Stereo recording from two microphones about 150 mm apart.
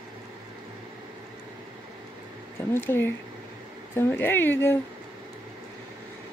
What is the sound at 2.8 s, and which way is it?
Speech, 15° left (ahead or behind).